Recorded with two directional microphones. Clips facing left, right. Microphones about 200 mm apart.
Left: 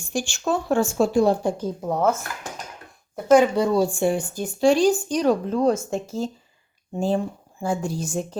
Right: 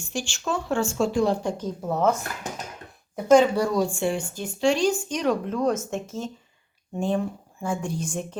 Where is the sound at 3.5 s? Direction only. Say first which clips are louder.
Left 3 dB; 25° left (ahead or behind).